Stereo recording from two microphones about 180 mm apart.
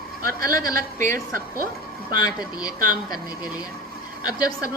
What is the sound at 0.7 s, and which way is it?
Speech, 45° right (ahead or behind).